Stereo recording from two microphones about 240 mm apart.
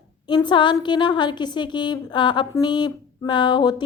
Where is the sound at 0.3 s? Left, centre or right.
Centre.